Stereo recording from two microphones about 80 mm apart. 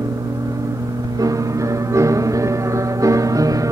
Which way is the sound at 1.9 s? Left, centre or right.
Right.